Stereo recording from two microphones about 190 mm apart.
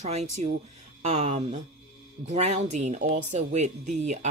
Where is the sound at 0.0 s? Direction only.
35° right (ahead or behind).